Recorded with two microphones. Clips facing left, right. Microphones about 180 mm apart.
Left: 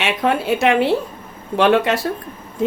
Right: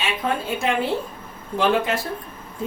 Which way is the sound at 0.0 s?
75° left (ahead or behind).